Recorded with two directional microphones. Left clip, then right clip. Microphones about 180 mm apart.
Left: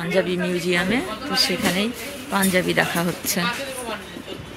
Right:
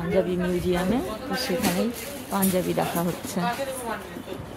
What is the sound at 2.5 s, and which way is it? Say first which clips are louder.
Speech: left 5 dB; centre (ahead or behind).